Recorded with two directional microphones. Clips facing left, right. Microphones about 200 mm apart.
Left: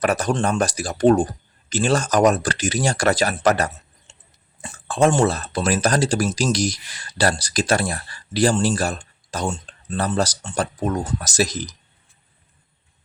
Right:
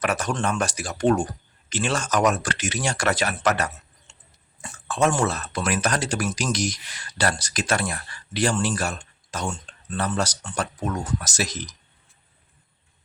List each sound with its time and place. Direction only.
0.0 s speech: 35° left (ahead or behind)